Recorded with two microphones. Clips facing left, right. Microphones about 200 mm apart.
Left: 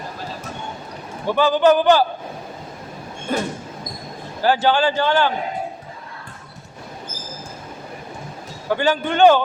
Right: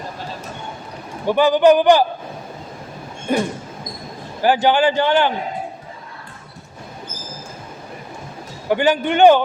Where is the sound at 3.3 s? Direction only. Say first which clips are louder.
Right 4 dB; 15° right (ahead or behind).